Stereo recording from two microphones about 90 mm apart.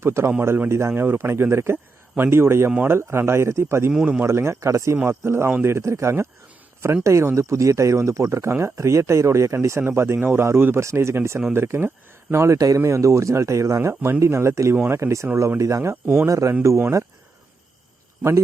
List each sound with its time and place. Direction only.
0.0 s a man's voice: 30° right (ahead or behind)
3.9 s speech: 10° right (ahead or behind)
4.2 s a man's voice: 30° right (ahead or behind)
18.2 s speech: 30° right (ahead or behind)